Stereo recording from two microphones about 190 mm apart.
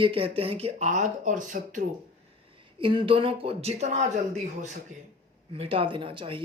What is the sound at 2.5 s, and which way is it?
Speech, 25° right (ahead or behind).